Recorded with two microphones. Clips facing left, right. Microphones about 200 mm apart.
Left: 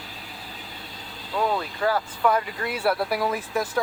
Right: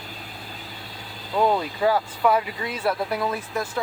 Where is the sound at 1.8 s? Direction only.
10° right (ahead or behind).